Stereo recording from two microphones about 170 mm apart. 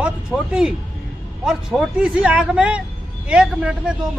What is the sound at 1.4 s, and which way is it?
Speech, 5° right (ahead or behind).